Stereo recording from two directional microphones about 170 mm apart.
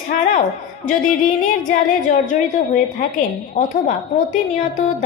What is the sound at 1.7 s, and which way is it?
Speech, 50° left (ahead or behind).